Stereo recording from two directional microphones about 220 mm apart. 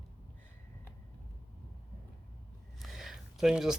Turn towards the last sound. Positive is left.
turn(degrees=-5)  # may be behind; listen again after turning